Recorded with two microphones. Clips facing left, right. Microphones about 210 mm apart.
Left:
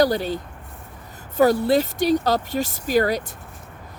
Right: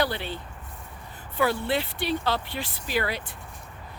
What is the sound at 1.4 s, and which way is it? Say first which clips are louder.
Speech: left 8 dB; 40° left (ahead or behind).